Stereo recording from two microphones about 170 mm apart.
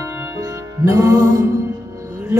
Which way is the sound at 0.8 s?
20° right (ahead or behind).